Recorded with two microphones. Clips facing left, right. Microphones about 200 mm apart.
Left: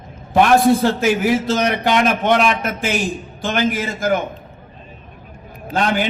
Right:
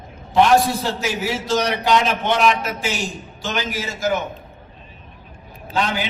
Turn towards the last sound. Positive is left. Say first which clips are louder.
# left 4 dB
turn(degrees=50)  # may be behind; listen again after turning